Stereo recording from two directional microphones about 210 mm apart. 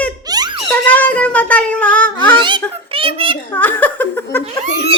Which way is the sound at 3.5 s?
10° left (ahead or behind).